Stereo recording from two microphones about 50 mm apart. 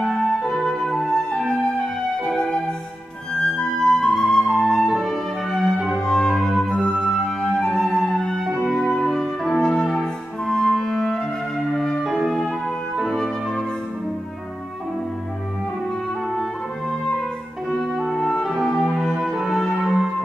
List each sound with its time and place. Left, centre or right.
0.0 s music: centre
3.5 s flute: centre
5.0 s music: centre
5.9 s music: centre
7.6 s flute: centre
8.2 s music: centre
8.5 s music: centre
8.7 s music: centre
12.0 s music: centre
13.0 s music: centre
17.9 s music: centre